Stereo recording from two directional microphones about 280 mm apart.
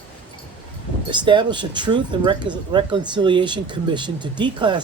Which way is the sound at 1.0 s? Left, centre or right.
Centre.